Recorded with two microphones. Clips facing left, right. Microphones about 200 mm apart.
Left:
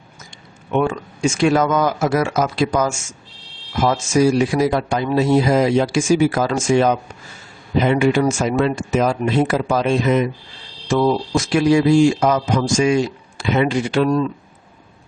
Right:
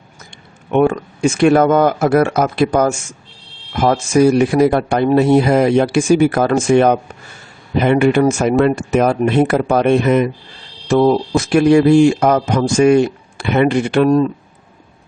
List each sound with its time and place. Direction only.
0.7 s speech: 60° right (ahead or behind)